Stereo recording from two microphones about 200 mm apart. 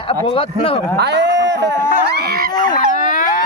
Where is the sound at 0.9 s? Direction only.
60° right (ahead or behind).